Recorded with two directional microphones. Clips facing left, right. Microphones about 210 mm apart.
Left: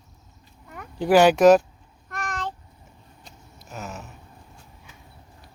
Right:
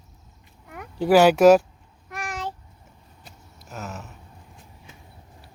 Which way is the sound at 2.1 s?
10° right (ahead or behind).